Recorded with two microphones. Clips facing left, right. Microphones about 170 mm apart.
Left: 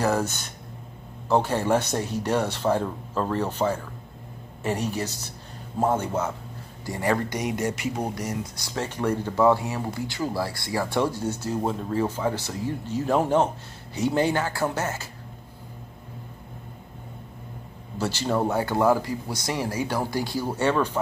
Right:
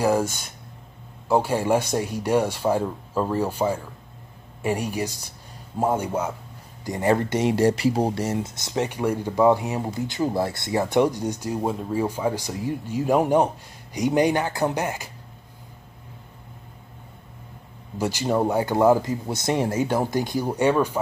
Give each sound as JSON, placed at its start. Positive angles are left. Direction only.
{"t": 0.0, "sound": "speech", "side_deg": -10}
{"t": 17.9, "sound": "speech", "side_deg": -15}